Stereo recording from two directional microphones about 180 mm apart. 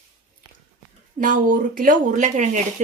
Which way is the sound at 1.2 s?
50° right (ahead or behind).